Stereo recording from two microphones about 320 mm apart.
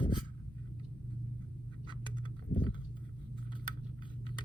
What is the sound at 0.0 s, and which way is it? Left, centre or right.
Writing, centre.